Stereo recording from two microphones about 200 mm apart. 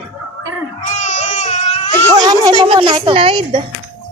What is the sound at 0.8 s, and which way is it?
Baby cry, 40° left (ahead or behind).